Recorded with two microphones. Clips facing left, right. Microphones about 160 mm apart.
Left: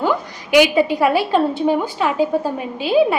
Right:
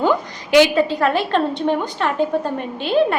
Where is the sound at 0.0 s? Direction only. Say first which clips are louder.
Right 2 dB; 10° left (ahead or behind).